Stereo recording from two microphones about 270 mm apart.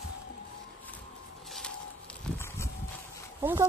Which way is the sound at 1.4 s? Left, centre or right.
Centre.